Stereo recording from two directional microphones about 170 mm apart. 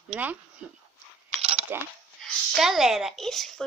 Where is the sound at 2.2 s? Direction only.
Centre (ahead or behind).